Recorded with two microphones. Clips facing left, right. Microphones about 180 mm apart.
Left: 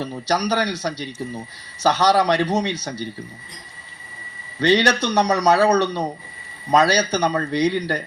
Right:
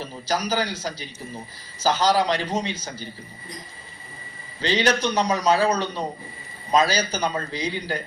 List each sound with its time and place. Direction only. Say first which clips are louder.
0.0 s a man's voice: left 4 dB; 70° left (ahead or behind)
4.6 s a man's voice: left 4 dB; 70° left (ahead or behind)